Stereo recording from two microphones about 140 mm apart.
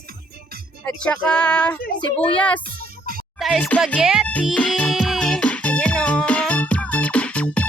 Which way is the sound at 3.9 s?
5° right (ahead or behind).